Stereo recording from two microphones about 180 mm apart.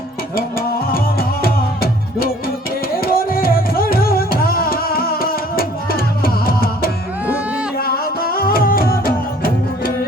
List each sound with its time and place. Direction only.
0.9 s music: 55° left (ahead or behind)